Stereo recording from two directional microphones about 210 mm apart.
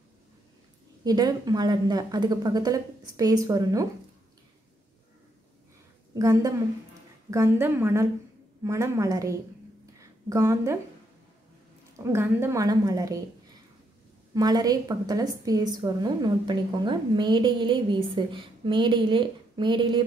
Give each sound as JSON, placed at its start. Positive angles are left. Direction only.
{"t": 1.0, "sound": "speech", "side_deg": -20}
{"t": 6.1, "sound": "speech", "side_deg": -15}
{"t": 9.9, "sound": "a sound", "side_deg": -15}
{"t": 12.1, "sound": "speech", "side_deg": -10}
{"t": 14.3, "sound": "a woman's voice", "side_deg": -20}